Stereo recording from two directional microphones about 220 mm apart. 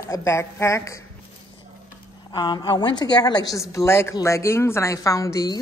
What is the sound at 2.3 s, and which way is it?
A woman's voice, 20° left (ahead or behind).